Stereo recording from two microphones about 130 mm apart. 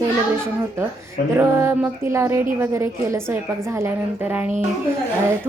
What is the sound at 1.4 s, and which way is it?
A woman's voice, 15° right (ahead or behind).